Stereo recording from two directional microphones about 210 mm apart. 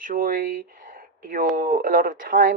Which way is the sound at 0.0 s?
40° right (ahead or behind).